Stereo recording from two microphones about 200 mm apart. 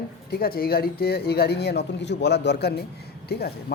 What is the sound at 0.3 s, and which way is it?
Speech, 50° left (ahead or behind).